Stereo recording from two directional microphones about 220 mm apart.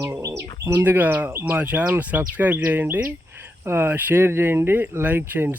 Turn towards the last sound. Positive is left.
turn(degrees=-10)  # may be behind; listen again after turning